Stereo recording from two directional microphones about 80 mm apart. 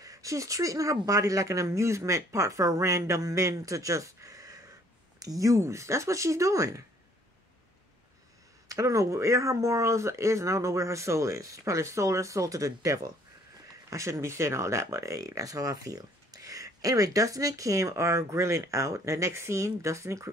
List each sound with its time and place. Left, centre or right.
0.0 s speech: right
8.6 s speech: right